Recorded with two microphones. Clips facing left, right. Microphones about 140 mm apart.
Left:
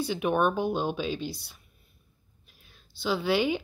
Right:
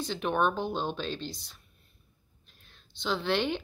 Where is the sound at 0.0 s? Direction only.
10° left (ahead or behind).